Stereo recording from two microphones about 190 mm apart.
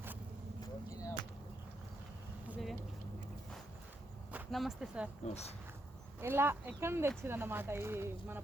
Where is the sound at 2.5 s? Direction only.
Centre (ahead or behind).